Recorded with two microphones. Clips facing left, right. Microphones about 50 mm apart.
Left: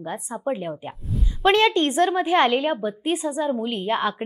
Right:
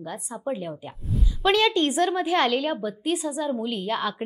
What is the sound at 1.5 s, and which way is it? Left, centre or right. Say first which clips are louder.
A woman's voice: left 3 dB; left.